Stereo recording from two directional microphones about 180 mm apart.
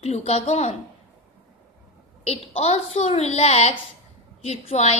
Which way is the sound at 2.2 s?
35° left (ahead or behind).